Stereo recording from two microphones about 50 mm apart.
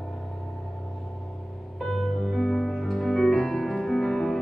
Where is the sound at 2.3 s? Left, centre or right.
Centre.